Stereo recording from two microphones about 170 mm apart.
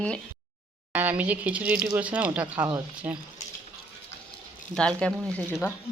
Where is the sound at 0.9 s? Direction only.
10° right (ahead or behind).